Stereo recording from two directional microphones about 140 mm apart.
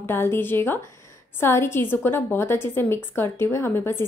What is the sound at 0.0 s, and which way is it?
A woman's voice, 15° left (ahead or behind).